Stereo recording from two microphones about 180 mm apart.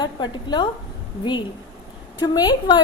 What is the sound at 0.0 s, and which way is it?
Speech, 25° left (ahead or behind).